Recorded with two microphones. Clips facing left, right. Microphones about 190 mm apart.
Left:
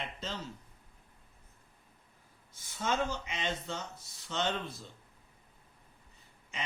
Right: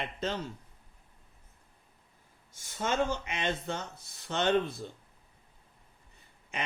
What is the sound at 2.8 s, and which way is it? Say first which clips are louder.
Speech: right 3 dB; 60° right (ahead or behind).